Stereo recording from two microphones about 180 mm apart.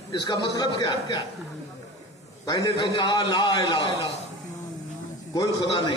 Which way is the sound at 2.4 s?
20° left (ahead or behind).